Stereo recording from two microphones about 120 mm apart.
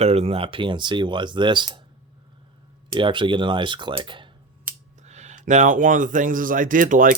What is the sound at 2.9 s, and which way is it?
Speech, 45° right (ahead or behind).